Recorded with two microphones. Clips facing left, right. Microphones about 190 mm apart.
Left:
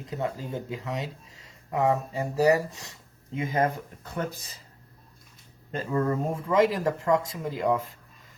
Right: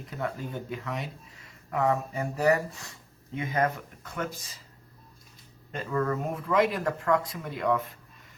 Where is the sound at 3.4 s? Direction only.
30° left (ahead or behind).